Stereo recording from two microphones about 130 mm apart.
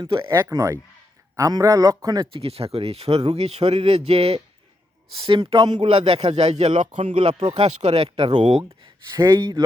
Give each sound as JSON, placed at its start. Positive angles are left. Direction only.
{"t": 0.2, "sound": "speech", "side_deg": -20}
{"t": 2.3, "sound": "speech", "side_deg": -50}
{"t": 5.9, "sound": "speech", "side_deg": -50}
{"t": 8.3, "sound": "speech", "side_deg": -60}
{"t": 9.1, "sound": "speech", "side_deg": -20}